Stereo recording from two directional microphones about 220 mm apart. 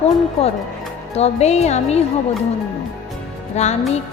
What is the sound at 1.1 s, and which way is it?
Speech, 30° left (ahead or behind).